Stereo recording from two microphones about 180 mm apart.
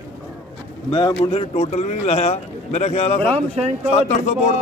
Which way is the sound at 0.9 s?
30° left (ahead or behind).